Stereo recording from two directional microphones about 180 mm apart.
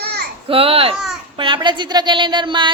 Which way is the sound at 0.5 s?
30° right (ahead or behind).